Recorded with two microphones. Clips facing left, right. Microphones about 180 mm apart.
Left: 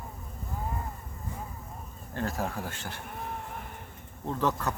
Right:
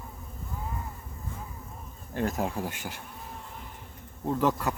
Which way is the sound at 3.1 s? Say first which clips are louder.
Left 5 dB; 60° left (ahead or behind).